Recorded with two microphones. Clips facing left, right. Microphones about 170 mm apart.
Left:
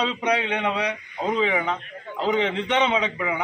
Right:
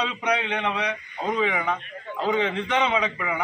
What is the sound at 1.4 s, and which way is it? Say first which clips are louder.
A man's voice: left 2 dB; 25° left (ahead or behind).